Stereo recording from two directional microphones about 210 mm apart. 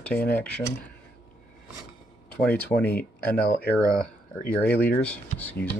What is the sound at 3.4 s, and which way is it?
Speech, 45° left (ahead or behind).